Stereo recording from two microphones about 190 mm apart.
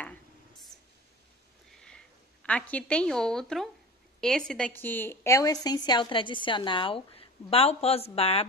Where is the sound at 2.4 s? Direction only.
5° left (ahead or behind).